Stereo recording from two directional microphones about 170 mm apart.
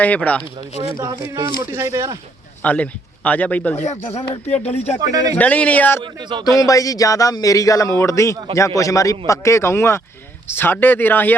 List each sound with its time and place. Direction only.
0.0 s speech: 10° left (ahead or behind)
0.8 s speech: 25° right (ahead or behind)
2.6 s speech: 10° left (ahead or behind)
4.6 s speech: 40° left (ahead or behind)
4.9 s speech: 20° right (ahead or behind)
5.4 s speech: 10° left (ahead or behind)
6.0 s speech: 25° right (ahead or behind)
6.6 s a man's voice: 20° left (ahead or behind)